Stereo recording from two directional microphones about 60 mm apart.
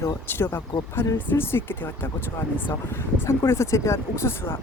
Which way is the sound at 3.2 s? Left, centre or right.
Left.